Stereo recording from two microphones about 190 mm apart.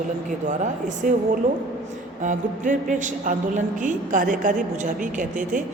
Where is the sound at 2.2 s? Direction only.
40° right (ahead or behind).